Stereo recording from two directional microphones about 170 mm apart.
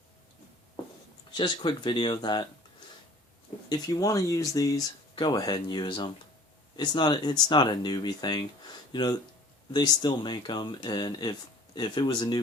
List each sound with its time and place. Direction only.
1.4 s speech: 25° left (ahead or behind)
3.7 s speech: 20° left (ahead or behind)